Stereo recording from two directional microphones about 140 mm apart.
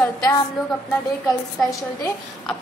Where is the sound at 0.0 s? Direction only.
25° left (ahead or behind).